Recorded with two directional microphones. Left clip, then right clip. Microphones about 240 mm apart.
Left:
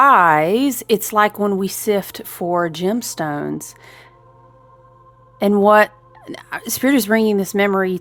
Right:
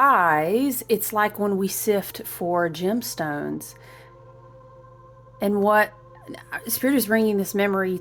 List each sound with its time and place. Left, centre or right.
0.0 s a woman's voice: left
5.4 s a woman's voice: left